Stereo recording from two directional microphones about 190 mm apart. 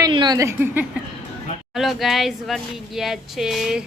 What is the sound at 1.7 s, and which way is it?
A woman's voice, centre (ahead or behind).